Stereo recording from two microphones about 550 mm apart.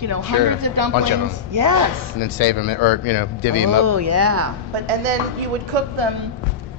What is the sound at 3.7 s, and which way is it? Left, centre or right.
Speech, right.